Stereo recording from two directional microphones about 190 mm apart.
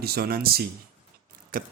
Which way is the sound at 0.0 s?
55° right (ahead or behind).